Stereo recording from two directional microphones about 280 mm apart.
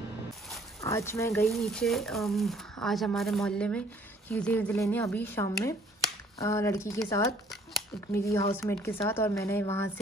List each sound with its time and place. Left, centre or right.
0.7 s speech: centre
8.3 s speech: centre